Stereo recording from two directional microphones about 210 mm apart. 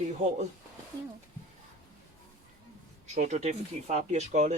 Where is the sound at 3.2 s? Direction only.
35° right (ahead or behind).